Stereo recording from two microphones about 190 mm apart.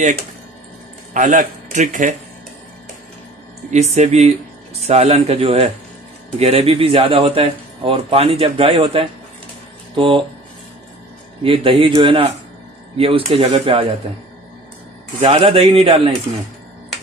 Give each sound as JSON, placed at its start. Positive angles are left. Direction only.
{"t": 1.1, "sound": "a man's voice", "side_deg": -40}
{"t": 3.7, "sound": "speech", "side_deg": -35}
{"t": 11.4, "sound": "speech", "side_deg": -25}
{"t": 15.1, "sound": "speech", "side_deg": -35}